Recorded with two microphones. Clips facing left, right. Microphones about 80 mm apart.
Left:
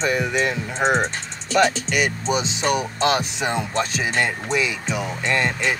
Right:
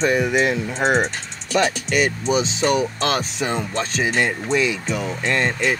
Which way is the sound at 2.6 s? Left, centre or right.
Centre.